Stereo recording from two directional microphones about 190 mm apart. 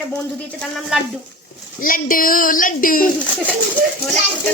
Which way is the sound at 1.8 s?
45° left (ahead or behind).